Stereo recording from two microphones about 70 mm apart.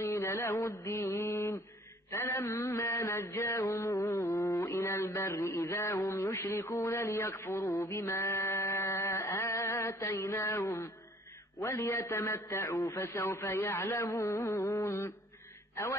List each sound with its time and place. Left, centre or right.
0.0 s mantra: left
8.0 s a sound: left
11.6 s mantra: left
12.7 s mantra: left
15.7 s a man's voice: left